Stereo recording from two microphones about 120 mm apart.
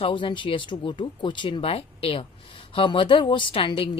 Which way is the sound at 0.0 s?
45° left (ahead or behind).